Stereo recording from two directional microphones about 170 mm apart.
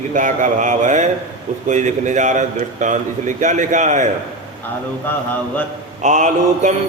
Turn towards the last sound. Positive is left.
turn(degrees=-45)  # may be behind; listen again after turning